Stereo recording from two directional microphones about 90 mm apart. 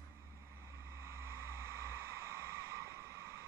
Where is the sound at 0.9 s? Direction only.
30° right (ahead or behind).